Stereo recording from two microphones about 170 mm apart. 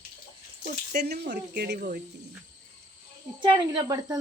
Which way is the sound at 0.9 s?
70° right (ahead or behind).